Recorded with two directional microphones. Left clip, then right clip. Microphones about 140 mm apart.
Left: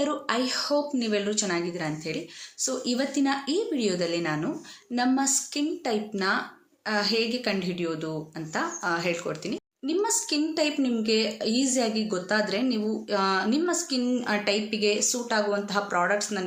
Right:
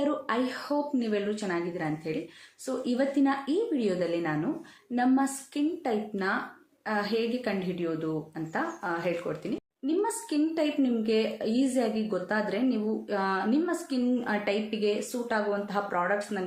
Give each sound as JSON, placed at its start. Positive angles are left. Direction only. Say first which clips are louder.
{"t": 0.0, "sound": "a woman's voice", "louder": "left 2 dB", "side_deg": 15}